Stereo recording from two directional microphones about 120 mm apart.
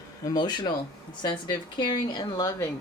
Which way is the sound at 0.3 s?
35° left (ahead or behind).